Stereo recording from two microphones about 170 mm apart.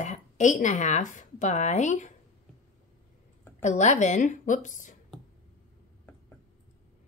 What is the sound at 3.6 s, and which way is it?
Speech, 45° left (ahead or behind).